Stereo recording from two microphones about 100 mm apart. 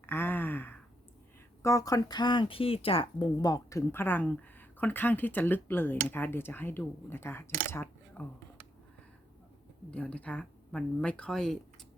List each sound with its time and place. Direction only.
0.0 s a sound: 20° left (ahead or behind)
1.6 s speech: 35° left (ahead or behind); by 3.2 s 65° left (ahead or behind)
3.3 s speech: 40° left (ahead or behind); by 8.2 s 25° left (ahead or behind)
9.9 s speech: 10° left (ahead or behind)